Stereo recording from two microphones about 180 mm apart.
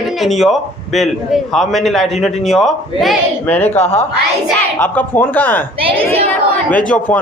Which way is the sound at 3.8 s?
35° left (ahead or behind).